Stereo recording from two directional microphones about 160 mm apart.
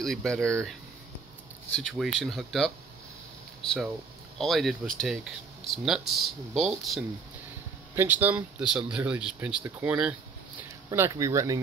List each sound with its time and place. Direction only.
0.0 s speech: 5° left (ahead or behind)
1.7 s speech: 5° left (ahead or behind)
7.9 s speech: 15° right (ahead or behind)
10.9 s speech: 20° right (ahead or behind)